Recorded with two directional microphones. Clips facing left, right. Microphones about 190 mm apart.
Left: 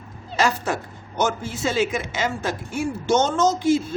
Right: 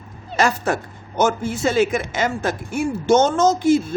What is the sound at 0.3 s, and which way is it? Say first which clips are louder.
Speech: right 3 dB; 50° right (ahead or behind).